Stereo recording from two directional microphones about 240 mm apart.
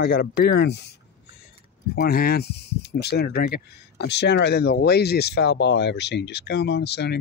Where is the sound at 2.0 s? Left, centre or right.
Left.